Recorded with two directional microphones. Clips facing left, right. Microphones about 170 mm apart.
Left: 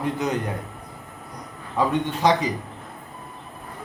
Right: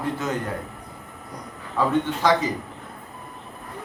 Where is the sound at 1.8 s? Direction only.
15° left (ahead or behind).